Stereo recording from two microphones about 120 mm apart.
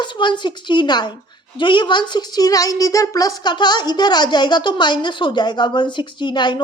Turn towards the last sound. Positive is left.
turn(degrees=40)  # may be behind; listen again after turning